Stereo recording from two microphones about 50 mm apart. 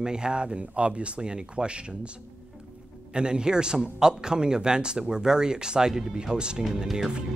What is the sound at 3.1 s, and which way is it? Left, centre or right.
A man's voice, centre.